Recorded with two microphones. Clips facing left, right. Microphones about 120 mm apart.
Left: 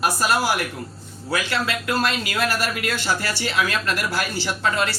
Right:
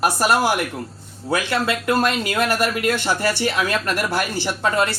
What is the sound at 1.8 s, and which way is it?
Speech, 45° right (ahead or behind).